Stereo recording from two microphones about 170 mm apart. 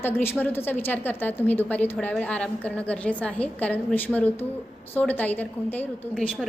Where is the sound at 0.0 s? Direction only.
15° left (ahead or behind).